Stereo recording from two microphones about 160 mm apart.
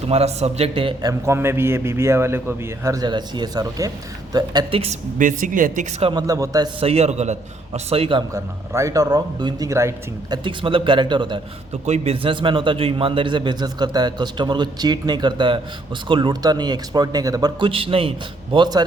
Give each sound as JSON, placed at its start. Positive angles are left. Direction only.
{"t": 0.1, "sound": "a man's voice", "side_deg": -40}
{"t": 1.2, "sound": "a man's voice", "side_deg": -15}
{"t": 4.8, "sound": "a woman's voice", "side_deg": -50}
{"t": 6.0, "sound": "a man's voice", "side_deg": -30}
{"t": 6.7, "sound": "a man's voice", "side_deg": -40}
{"t": 8.3, "sound": "a man's voice", "side_deg": -20}